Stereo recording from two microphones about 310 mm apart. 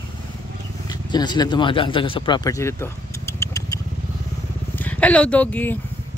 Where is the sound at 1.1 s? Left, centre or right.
Centre.